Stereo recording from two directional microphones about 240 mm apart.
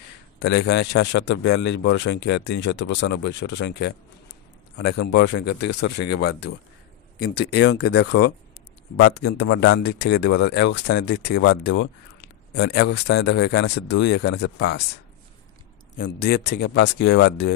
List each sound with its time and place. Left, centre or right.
0.4 s a man's voice: left
7.5 s a man's voice: left
16.0 s a man's voice: left